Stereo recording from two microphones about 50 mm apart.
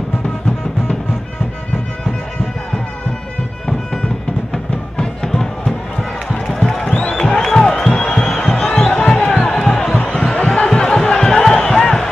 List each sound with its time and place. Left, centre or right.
4.9 s music: centre
6.9 s music: centre
7.2 s music: centre
9.4 s a sound: centre
9.9 s music: left